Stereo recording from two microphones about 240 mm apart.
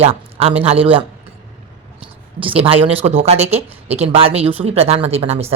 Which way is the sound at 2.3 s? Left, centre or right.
Right.